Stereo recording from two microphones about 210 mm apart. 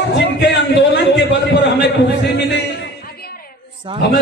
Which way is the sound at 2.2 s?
55° left (ahead or behind).